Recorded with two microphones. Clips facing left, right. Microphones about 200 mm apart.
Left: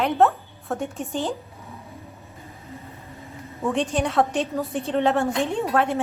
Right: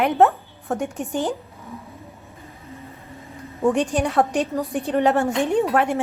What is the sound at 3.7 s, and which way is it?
A woman's voice, 15° right (ahead or behind).